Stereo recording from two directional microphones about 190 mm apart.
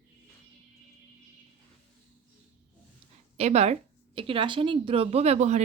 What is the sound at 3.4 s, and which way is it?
A woman's voice, 35° right (ahead or behind).